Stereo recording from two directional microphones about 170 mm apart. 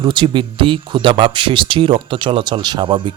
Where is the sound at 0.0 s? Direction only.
30° right (ahead or behind).